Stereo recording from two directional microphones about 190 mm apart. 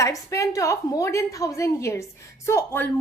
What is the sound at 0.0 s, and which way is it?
A woman's voice, 15° left (ahead or behind).